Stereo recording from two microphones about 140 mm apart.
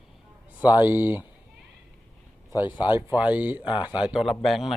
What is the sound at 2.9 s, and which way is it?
A man's voice, 10° right (ahead or behind).